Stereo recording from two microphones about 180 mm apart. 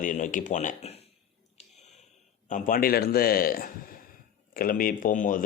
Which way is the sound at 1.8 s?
40° left (ahead or behind).